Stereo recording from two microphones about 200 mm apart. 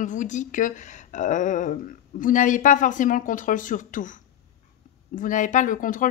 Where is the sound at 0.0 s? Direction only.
40° left (ahead or behind).